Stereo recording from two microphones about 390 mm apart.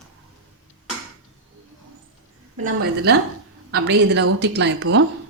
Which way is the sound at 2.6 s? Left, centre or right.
Right.